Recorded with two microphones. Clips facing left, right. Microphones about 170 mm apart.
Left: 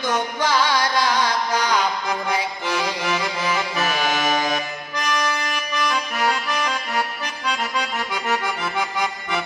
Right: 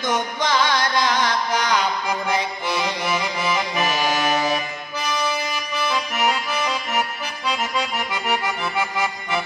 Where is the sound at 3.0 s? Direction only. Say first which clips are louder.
Even; 10° right (ahead or behind).